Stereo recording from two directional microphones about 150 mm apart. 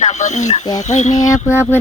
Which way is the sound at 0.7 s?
50° left (ahead or behind).